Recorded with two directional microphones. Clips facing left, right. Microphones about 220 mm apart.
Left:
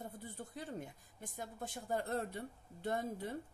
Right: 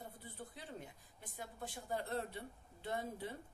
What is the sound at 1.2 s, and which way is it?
Speech, 45° left (ahead or behind).